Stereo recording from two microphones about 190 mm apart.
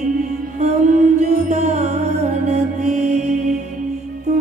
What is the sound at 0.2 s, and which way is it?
Music, 40° right (ahead or behind).